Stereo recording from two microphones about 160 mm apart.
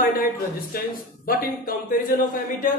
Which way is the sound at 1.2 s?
65° left (ahead or behind).